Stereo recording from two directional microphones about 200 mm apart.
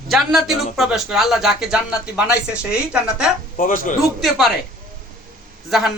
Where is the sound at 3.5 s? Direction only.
45° left (ahead or behind).